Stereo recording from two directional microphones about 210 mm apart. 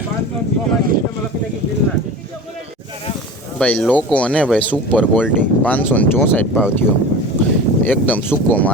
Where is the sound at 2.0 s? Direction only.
35° right (ahead or behind).